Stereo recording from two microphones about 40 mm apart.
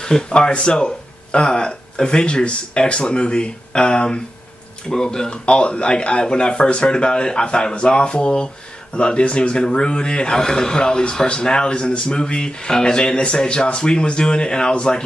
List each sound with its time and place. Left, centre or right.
0.3 s speech: left
5.6 s speech: left